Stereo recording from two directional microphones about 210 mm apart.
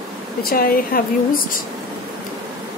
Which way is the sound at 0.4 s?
45° left (ahead or behind).